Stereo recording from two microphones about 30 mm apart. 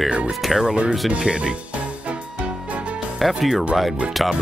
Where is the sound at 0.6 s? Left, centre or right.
Right.